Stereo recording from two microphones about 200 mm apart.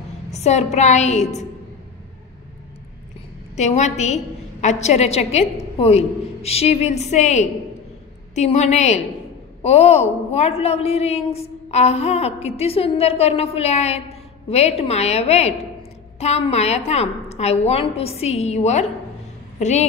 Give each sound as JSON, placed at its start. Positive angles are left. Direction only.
{"t": 0.3, "sound": "a woman's voice", "side_deg": 35}
{"t": 3.5, "sound": "a woman's voice", "side_deg": 35}